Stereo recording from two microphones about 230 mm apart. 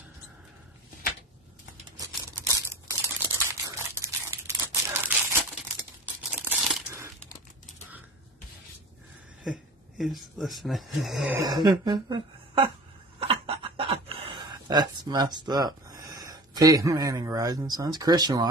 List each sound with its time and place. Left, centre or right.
2.0 s a sound: centre
3.4 s crumpling: centre
6.3 s crumpling: centre
9.4 s speech: centre
11.3 s speech: centre
13.3 s a sound: right